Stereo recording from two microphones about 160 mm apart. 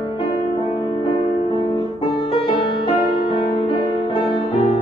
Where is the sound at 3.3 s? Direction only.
30° left (ahead or behind).